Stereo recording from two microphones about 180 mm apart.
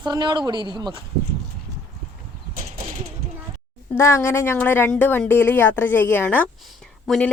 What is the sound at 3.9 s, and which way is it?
Speech, 15° left (ahead or behind).